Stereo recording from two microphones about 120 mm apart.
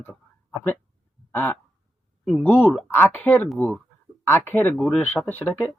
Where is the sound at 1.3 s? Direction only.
15° left (ahead or behind).